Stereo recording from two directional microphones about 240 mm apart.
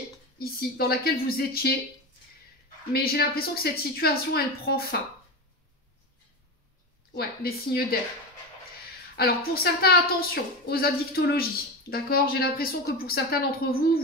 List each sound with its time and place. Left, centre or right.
0.4 s a woman's voice: left
2.9 s a woman's voice: left
7.2 s a woman's voice: left
9.1 s a woman's voice: left